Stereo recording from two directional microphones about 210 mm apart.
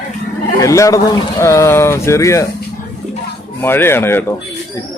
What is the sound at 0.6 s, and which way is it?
Speech, 15° left (ahead or behind).